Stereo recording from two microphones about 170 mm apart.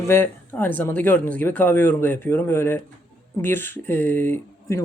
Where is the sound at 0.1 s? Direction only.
10° left (ahead or behind).